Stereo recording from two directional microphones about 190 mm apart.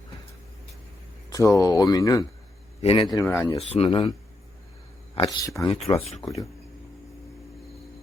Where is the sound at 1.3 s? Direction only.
15° left (ahead or behind).